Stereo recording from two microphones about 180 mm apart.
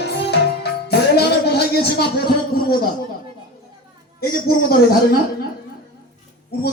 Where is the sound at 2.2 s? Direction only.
55° left (ahead or behind).